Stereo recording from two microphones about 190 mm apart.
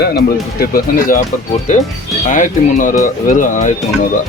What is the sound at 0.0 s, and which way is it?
Speech, 55° left (ahead or behind).